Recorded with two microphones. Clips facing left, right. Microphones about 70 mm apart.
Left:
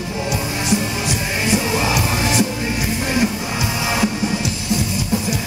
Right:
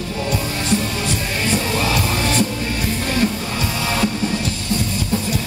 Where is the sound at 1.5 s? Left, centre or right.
Centre.